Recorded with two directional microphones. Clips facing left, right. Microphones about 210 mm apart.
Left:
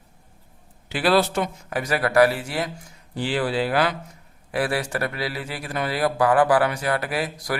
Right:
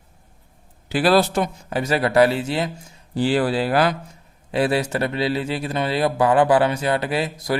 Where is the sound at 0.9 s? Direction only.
40° right (ahead or behind).